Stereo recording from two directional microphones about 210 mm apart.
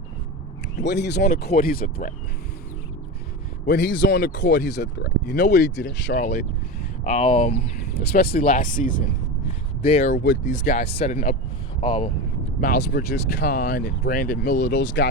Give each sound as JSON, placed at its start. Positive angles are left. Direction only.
{"t": 0.8, "sound": "speech", "side_deg": 55}
{"t": 3.7, "sound": "speech", "side_deg": 55}
{"t": 7.0, "sound": "speech", "side_deg": 35}
{"t": 7.9, "sound": "speech", "side_deg": 45}
{"t": 11.8, "sound": "speech", "side_deg": 25}
{"t": 12.5, "sound": "speech", "side_deg": 40}